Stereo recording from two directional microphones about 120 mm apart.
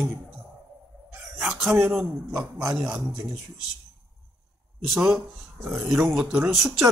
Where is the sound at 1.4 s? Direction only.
5° right (ahead or behind).